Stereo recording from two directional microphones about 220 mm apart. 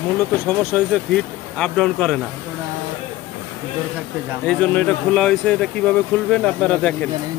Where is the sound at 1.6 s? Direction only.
5° left (ahead or behind).